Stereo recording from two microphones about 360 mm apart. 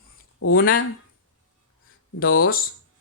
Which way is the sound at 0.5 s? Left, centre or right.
Left.